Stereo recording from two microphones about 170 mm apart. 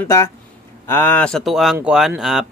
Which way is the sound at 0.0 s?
15° left (ahead or behind).